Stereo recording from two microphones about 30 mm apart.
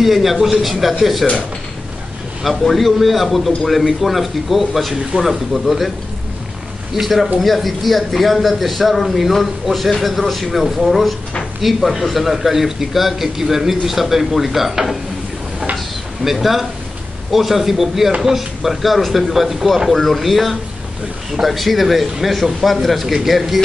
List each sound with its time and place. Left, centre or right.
0.0 s a man's voice: centre
2.6 s a man's voice: centre
5.1 s speech: right
5.5 s a man's voice: centre
7.0 s a man's voice: centre
16.3 s a man's voice: centre
19.9 s a man's voice: centre